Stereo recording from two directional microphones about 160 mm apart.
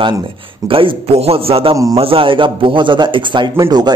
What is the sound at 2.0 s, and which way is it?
A man's voice, 35° right (ahead or behind).